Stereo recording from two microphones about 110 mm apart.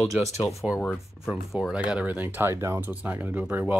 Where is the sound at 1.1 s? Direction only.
5° right (ahead or behind).